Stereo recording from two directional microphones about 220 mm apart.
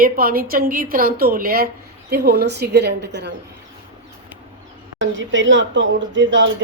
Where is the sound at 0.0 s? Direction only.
40° right (ahead or behind).